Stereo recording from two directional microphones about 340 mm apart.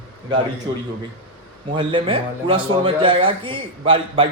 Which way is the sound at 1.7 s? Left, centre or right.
Centre.